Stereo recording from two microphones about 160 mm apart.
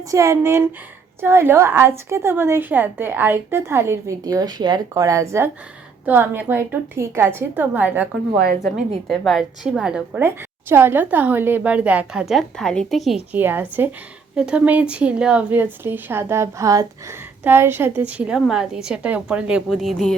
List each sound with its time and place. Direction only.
0.1 s a woman's voice: 20° right (ahead or behind)
8.6 s a woman's voice: centre (ahead or behind)
13.3 s a woman's voice: 10° right (ahead or behind)